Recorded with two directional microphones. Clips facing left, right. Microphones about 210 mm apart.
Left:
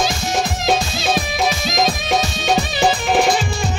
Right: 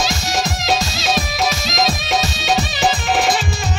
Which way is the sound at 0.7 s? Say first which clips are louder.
Left 2 dB; 55° left (ahead or behind).